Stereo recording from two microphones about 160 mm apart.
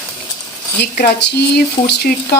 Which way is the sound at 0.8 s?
85° left.